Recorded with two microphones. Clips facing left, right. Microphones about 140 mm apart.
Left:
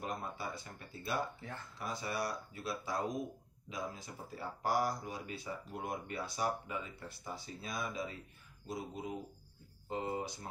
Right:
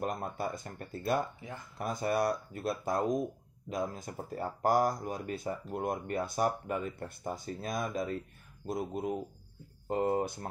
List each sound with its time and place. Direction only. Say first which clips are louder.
0.0 s speech: right 6 dB; 50° right (ahead or behind)
1.4 s speech: right 3 dB; 15° right (ahead or behind)
1.8 s speech: right 8 dB; 50° right (ahead or behind)